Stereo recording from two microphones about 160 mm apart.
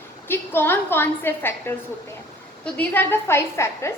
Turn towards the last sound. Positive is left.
turn(degrees=15)  # may be behind; listen again after turning